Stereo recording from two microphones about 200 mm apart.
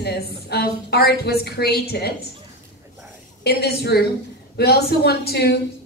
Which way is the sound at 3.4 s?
55° left (ahead or behind).